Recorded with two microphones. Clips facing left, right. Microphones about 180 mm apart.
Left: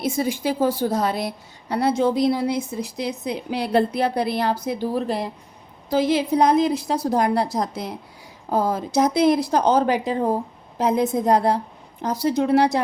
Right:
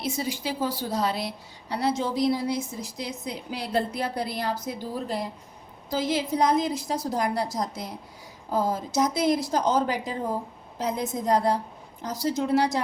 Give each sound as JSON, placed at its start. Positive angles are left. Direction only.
{"t": 0.0, "sound": "a woman's voice", "side_deg": 50}